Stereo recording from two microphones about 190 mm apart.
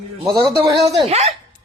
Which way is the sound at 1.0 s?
35° right (ahead or behind).